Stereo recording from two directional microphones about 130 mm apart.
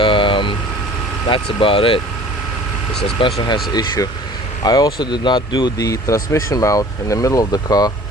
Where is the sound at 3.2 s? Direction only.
45° left (ahead or behind).